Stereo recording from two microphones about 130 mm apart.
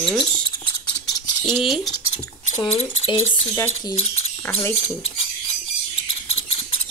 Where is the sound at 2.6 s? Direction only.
45° left (ahead or behind).